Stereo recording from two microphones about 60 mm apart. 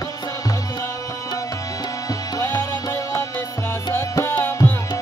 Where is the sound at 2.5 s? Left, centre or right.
Left.